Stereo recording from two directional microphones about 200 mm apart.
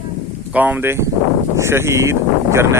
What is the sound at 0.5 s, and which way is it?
Speech, 10° right (ahead or behind).